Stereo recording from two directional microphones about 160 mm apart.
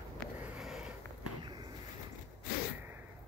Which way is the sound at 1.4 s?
25° right (ahead or behind).